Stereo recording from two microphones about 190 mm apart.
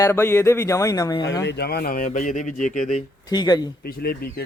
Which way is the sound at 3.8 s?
55° left (ahead or behind).